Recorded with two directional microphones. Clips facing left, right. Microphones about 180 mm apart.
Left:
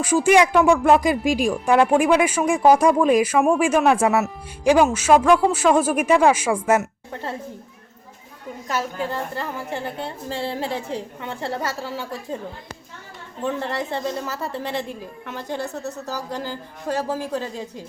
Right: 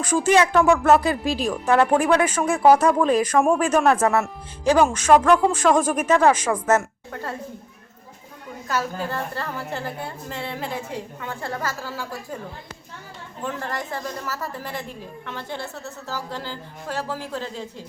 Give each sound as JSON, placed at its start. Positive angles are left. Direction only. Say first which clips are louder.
{"t": 0.0, "sound": "speech", "louder": "left 2 dB", "side_deg": 10}
{"t": 7.1, "sound": "a woman's voice", "louder": "even", "side_deg": 25}
{"t": 8.6, "sound": "speech", "louder": "even", "side_deg": 20}
{"t": 10.0, "sound": "a woman's voice", "louder": "left 4 dB", "side_deg": 30}
{"t": 13.4, "sound": "a woman's voice", "louder": "left 4 dB", "side_deg": 25}
{"t": 15.4, "sound": "a woman's voice", "louder": "left 6 dB", "side_deg": 40}
{"t": 16.3, "sound": "speech", "louder": "left 3 dB", "side_deg": 15}